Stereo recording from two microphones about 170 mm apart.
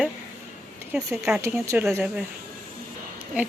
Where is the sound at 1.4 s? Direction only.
15° right (ahead or behind).